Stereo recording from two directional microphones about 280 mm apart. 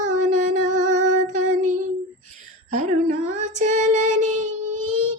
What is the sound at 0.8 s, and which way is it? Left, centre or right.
Female singing, right.